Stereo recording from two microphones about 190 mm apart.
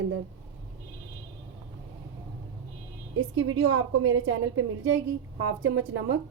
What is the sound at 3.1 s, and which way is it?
A woman's voice, 90° right.